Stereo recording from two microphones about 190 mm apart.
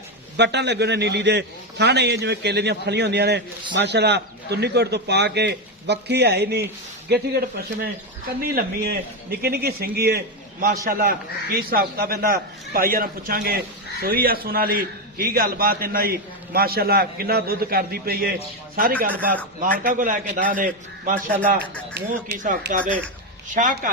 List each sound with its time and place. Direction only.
0.3 s a man's voice: 65° right (ahead or behind); by 23.9 s 45° right (ahead or behind)